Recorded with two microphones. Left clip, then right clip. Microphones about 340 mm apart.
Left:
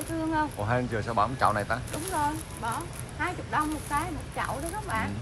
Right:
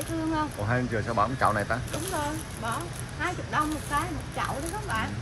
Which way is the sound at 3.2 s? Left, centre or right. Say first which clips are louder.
Right 1 dB; centre.